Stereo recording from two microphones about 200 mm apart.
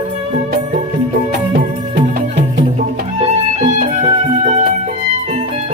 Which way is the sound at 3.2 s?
35° right (ahead or behind).